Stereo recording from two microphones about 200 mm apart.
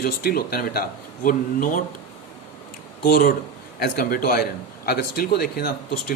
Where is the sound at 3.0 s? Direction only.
50° left (ahead or behind).